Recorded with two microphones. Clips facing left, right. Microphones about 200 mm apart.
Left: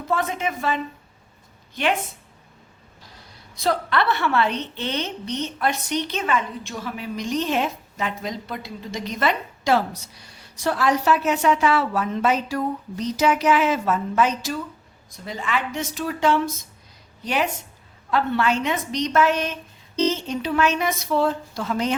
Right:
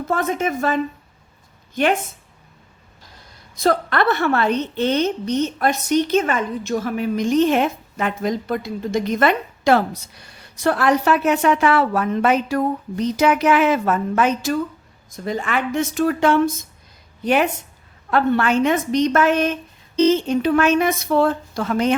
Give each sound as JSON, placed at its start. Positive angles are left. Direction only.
{"t": 0.1, "sound": "a woman's voice", "side_deg": -45}
{"t": 3.6, "sound": "a woman's voice", "side_deg": -50}